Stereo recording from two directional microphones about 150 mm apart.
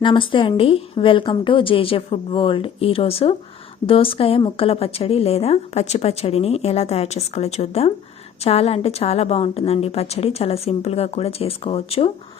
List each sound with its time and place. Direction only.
0.0 s a woman's voice: 35° left (ahead or behind)